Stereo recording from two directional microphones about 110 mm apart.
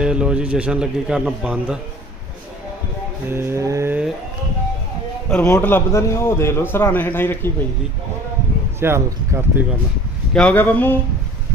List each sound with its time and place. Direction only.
0.0 s a man's voice: 10° right (ahead or behind)
3.3 s speech: 20° right (ahead or behind)
5.3 s a man's voice: 15° left (ahead or behind)
8.7 s speech: 25° right (ahead or behind)
10.5 s speech: 20° left (ahead or behind)